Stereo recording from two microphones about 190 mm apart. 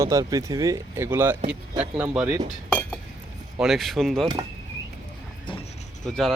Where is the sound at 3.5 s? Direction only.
Centre (ahead or behind).